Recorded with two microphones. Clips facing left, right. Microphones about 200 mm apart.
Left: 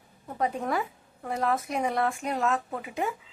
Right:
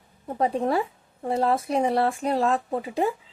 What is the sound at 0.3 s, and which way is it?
Speech, 30° right (ahead or behind).